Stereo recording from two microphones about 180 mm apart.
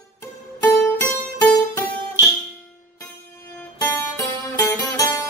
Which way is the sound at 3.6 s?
15° left (ahead or behind).